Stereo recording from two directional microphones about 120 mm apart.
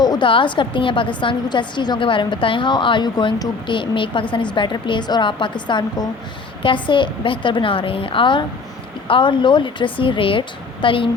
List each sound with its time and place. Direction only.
0.0 s a woman's voice: 40° left (ahead or behind)